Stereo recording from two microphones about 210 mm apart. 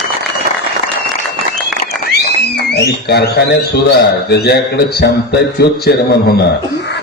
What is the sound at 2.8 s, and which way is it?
A man's voice, 50° left (ahead or behind).